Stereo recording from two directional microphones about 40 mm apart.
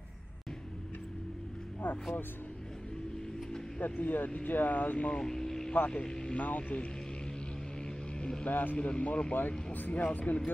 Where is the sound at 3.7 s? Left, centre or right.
Left.